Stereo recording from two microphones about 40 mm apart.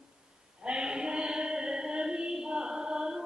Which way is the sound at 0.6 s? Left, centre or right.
Centre.